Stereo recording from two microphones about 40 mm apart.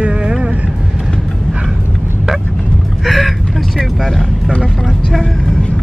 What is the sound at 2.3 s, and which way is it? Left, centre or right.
Vehicle, centre.